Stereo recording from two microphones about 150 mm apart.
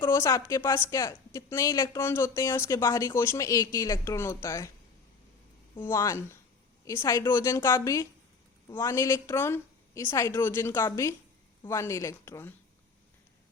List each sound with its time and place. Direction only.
0.0 s speech: 20° left (ahead or behind)
5.8 s a woman's voice: 20° left (ahead or behind)